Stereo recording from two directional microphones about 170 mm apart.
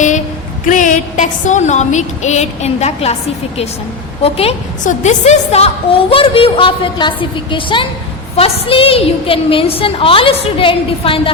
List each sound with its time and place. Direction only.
0.7 s a woman's voice: 50° left (ahead or behind)
4.2 s a woman's voice: 35° left (ahead or behind)